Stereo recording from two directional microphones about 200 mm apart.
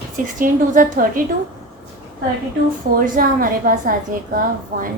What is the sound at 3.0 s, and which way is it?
A woman's voice, 45° right (ahead or behind).